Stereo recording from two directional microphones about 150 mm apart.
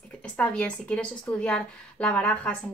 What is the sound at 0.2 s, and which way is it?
A woman's voice, 10° left (ahead or behind).